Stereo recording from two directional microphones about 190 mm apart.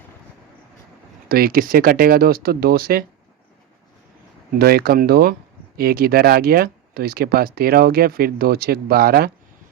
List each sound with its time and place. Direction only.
1.3 s speech: 50° right (ahead or behind)
4.5 s speech: 55° right (ahead or behind)